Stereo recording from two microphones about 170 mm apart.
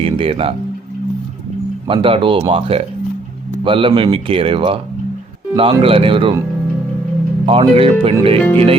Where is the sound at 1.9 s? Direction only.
30° right (ahead or behind).